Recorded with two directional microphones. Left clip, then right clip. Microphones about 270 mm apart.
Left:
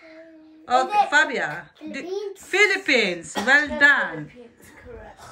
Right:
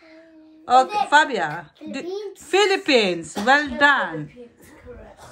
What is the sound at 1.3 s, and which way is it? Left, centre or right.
A woman's voice, centre.